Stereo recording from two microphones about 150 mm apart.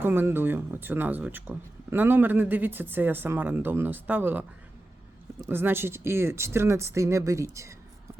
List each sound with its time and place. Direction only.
0.0 s speech: 15° right (ahead or behind)